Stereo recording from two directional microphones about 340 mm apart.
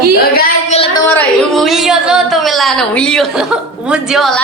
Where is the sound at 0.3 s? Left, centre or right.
Centre.